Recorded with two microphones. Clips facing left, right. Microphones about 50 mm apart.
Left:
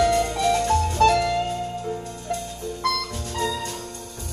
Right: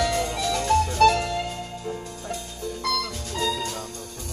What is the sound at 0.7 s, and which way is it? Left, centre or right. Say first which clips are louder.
Music: right 4 dB; left.